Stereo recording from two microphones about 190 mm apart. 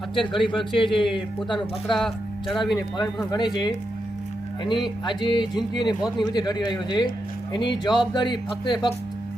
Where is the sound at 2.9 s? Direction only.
20° left (ahead or behind).